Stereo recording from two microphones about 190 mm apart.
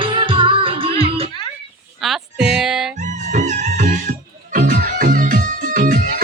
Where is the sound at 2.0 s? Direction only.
Centre (ahead or behind).